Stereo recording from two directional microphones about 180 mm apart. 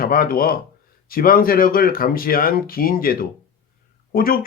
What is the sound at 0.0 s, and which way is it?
Speech, 55° left (ahead or behind).